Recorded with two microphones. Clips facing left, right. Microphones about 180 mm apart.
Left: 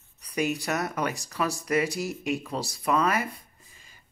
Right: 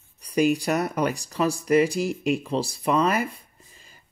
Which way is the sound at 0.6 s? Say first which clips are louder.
Right 5 dB; 30° right (ahead or behind).